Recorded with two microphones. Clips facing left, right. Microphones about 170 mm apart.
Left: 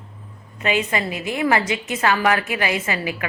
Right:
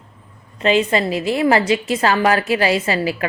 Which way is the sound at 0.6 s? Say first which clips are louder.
Right 6 dB; 30° right (ahead or behind).